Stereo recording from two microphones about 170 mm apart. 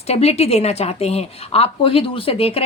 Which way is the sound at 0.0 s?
40° left (ahead or behind).